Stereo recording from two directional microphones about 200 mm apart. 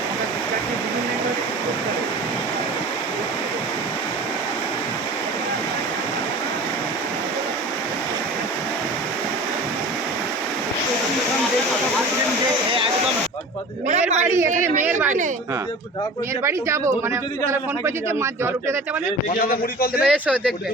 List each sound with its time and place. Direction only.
14.3 s a man's voice: 15° right (ahead or behind)
16.4 s a man's voice: 15° right (ahead or behind)
19.4 s a man's voice: 45° left (ahead or behind)
20.1 s speech: 5° right (ahead or behind)